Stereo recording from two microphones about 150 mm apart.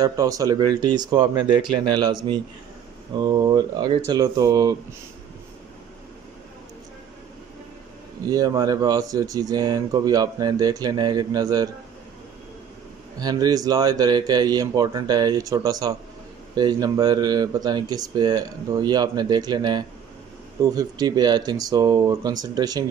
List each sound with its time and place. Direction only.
0.0 s speech: 25° right (ahead or behind)
3.2 s speech: 25° right (ahead or behind)
8.2 s speech: 25° right (ahead or behind)
13.2 s speech: 25° right (ahead or behind)